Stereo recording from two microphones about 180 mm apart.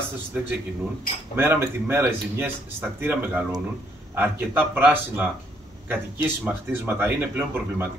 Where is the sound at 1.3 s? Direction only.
10° right (ahead or behind).